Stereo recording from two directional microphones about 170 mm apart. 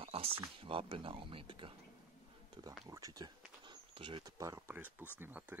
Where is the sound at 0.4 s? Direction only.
30° right (ahead or behind).